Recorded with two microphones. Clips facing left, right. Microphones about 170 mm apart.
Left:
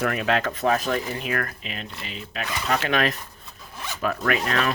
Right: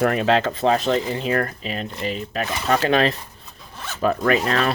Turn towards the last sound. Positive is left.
turn(degrees=-35)  # may be behind; listen again after turning